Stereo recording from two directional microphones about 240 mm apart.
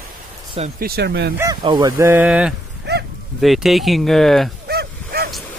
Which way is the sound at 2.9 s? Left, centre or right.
Right.